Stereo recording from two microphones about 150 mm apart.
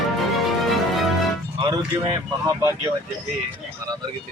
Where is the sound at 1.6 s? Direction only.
30° right (ahead or behind).